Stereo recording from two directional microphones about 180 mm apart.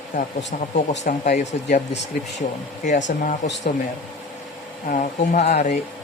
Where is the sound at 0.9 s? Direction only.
45° left (ahead or behind).